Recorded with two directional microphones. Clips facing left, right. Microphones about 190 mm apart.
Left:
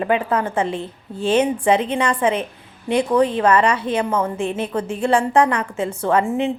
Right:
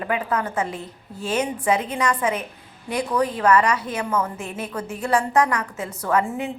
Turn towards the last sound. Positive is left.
turn(degrees=25)  # may be behind; listen again after turning